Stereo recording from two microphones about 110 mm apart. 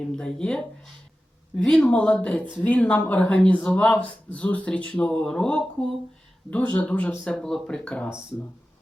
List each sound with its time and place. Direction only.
0.0 s speech: 5° left (ahead or behind)